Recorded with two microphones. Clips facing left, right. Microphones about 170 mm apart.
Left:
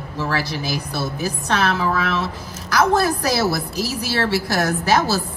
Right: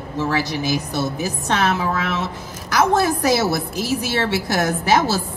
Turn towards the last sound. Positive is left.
turn(degrees=-25)  # may be behind; listen again after turning